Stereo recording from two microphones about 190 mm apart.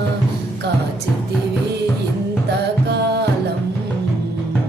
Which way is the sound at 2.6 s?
60° right (ahead or behind).